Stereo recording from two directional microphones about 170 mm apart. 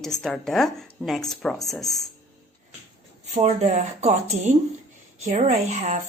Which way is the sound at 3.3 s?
40° right (ahead or behind).